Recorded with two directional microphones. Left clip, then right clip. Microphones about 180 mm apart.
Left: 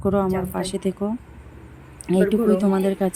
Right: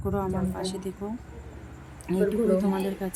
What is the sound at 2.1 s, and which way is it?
A woman's voice, 35° left (ahead or behind).